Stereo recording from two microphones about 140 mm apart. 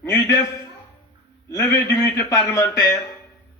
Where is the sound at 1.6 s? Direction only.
20° left (ahead or behind).